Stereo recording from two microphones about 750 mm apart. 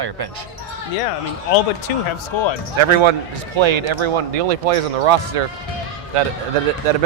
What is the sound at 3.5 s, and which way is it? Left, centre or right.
Speech, right.